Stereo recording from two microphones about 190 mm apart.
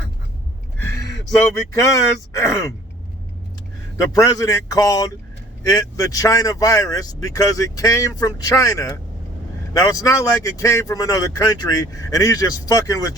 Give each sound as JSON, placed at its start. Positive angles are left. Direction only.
{"t": 1.7, "sound": "speech", "side_deg": 15}
{"t": 4.1, "sound": "speech", "side_deg": 15}